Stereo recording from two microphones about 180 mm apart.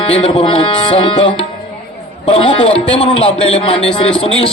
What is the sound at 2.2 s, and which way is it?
A man's voice, 30° left (ahead or behind).